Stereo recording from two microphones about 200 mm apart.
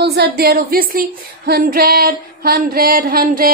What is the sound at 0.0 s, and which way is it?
A woman's voice, 55° right (ahead or behind).